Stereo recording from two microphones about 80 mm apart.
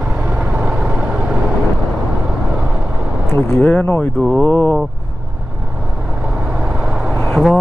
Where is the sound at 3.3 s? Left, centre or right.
Left.